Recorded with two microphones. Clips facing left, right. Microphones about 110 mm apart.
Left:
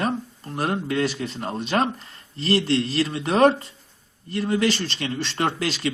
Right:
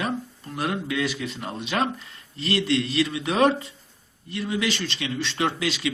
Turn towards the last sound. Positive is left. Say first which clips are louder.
# left 1 dB
turn(degrees=45)  # may be behind; listen again after turning